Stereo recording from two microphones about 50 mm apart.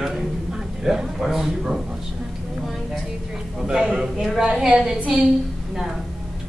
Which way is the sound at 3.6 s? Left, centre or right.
Centre.